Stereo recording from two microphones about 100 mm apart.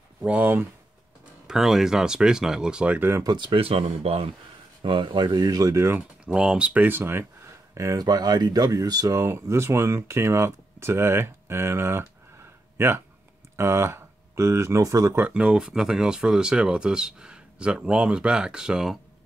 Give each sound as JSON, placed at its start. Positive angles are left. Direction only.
{"t": 0.2, "sound": "speech", "side_deg": -15}
{"t": 1.5, "sound": "speech", "side_deg": -5}
{"t": 3.3, "sound": "speech", "side_deg": -55}
{"t": 4.8, "sound": "speech", "side_deg": -55}
{"t": 5.9, "sound": "speech", "side_deg": -10}
{"t": 15.1, "sound": "speech", "side_deg": -15}